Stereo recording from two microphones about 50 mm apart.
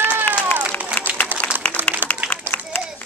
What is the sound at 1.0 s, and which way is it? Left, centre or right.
Applause, left.